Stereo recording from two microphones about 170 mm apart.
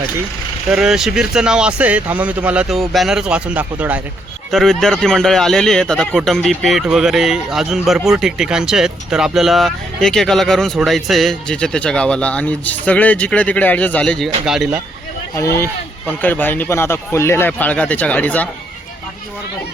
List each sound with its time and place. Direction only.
0.7 s speech: 5° right (ahead or behind)
4.5 s speech: centre (ahead or behind)
15.4 s speech: 15° left (ahead or behind)